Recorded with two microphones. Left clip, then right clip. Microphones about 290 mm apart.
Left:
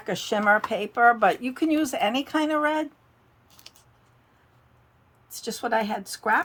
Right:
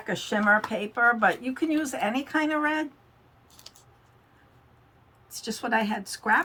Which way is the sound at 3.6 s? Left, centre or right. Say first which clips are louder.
Even; centre.